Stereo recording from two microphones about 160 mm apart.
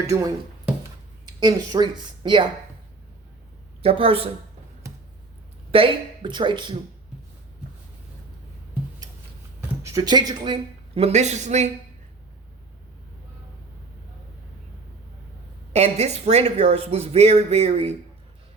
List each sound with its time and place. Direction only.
0.1 s speech: 20° right (ahead or behind)
3.8 s speech: 35° right (ahead or behind)
5.7 s speech: 35° right (ahead or behind)
9.6 s speech: 20° right (ahead or behind); by 11.7 s 45° right (ahead or behind)
15.7 s speech: 45° right (ahead or behind)